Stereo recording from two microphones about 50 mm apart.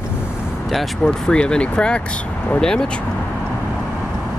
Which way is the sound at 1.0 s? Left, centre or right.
Centre.